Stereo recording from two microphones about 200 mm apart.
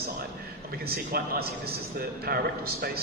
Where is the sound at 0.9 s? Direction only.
50° right (ahead or behind).